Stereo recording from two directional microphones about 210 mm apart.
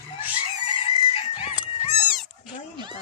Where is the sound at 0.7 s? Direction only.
25° left (ahead or behind).